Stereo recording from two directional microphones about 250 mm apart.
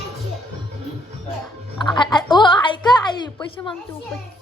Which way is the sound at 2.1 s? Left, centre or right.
Centre.